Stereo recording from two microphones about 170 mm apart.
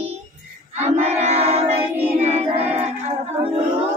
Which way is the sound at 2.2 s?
40° right (ahead or behind).